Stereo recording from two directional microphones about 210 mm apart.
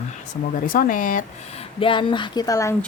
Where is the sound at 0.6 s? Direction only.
40° left (ahead or behind).